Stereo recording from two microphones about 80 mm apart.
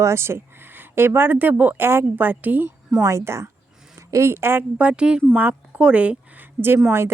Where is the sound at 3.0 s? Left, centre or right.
Right.